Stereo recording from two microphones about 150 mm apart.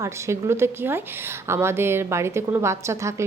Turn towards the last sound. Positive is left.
turn(degrees=-20)  # may be behind; listen again after turning